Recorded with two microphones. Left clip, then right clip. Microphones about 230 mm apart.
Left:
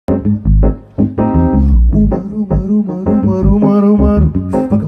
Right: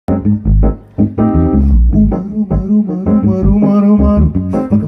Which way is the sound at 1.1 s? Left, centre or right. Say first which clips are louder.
Even; centre.